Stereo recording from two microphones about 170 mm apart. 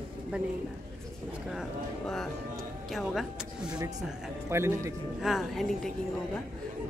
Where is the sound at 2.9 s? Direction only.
Centre (ahead or behind).